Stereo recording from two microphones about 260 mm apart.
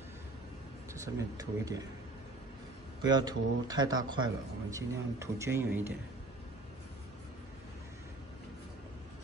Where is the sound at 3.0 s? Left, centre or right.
Centre.